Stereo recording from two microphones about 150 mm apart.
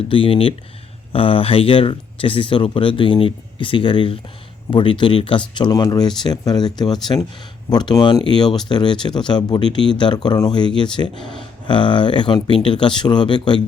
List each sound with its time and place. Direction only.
0.1 s speech: 35° left (ahead or behind)